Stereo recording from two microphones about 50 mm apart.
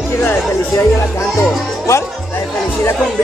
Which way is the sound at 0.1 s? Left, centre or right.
Left.